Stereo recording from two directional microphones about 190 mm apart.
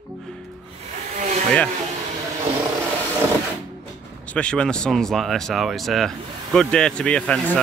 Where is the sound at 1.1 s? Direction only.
40° right (ahead or behind).